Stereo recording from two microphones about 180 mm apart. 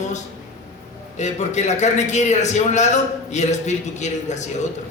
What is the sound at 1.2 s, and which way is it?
A man's voice, 40° left (ahead or behind).